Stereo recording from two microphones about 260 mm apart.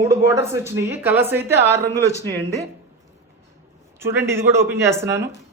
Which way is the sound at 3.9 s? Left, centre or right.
Centre.